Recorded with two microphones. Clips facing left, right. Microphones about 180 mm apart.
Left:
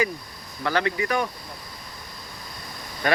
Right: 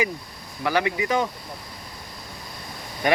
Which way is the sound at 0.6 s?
15° right (ahead or behind).